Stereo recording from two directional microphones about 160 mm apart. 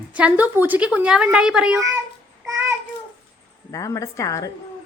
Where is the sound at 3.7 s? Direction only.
20° left (ahead or behind).